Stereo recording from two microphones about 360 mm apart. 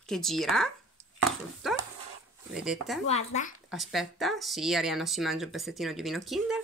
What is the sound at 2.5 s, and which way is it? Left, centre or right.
Speech, centre.